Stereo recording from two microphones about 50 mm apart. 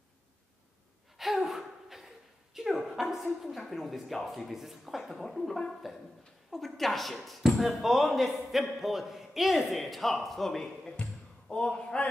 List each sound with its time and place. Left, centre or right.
1.1 s gasp: centre
2.5 s a woman's voice: centre
11.4 s speech: centre